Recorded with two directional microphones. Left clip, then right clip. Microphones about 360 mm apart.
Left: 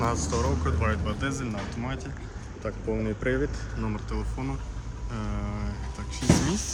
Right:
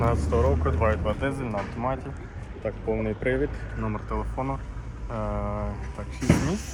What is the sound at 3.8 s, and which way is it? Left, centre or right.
Speech, centre.